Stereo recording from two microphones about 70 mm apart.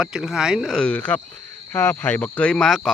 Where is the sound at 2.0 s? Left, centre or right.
Left.